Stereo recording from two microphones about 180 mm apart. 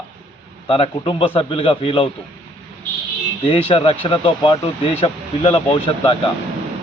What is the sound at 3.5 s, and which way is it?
A man's voice, 30° left (ahead or behind).